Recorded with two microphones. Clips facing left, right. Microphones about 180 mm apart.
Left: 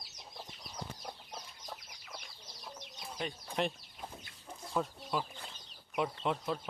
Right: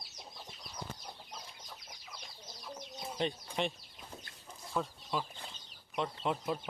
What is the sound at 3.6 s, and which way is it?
Speech, centre (ahead or behind).